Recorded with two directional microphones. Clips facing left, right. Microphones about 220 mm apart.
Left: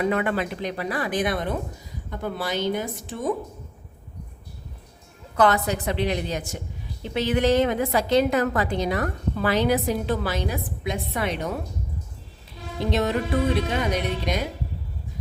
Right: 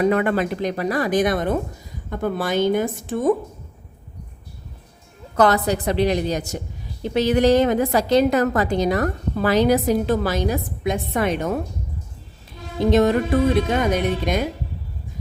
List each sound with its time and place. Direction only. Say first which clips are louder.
0.0 s speech: right 5 dB; 45° right (ahead or behind)
5.4 s a woman's voice: right 3 dB; 35° right (ahead or behind)
12.9 s speech: right 7 dB; 45° right (ahead or behind)